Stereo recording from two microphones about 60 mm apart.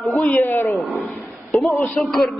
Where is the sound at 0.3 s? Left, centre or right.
Left.